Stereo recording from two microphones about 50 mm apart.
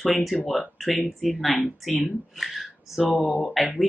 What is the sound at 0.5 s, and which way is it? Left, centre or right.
Speech, centre.